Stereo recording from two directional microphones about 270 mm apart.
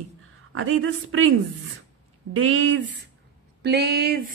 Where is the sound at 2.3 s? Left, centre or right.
Right.